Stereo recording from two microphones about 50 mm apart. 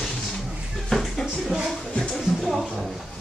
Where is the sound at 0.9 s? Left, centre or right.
Centre.